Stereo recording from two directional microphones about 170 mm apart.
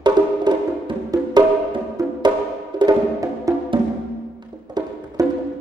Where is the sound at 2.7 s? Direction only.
20° right (ahead or behind).